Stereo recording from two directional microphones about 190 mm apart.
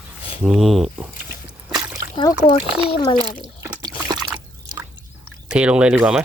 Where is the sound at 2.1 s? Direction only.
25° left (ahead or behind).